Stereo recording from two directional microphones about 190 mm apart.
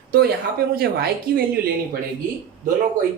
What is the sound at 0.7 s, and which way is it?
Speech, 55° right (ahead or behind).